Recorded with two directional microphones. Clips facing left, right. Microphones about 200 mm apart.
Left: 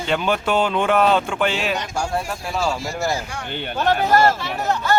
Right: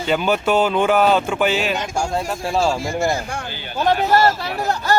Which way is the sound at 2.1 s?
30° right (ahead or behind).